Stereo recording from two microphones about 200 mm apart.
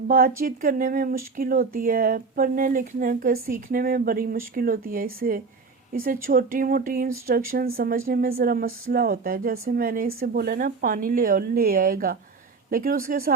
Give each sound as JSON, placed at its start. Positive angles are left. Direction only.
{"t": 0.1, "sound": "speech", "side_deg": -45}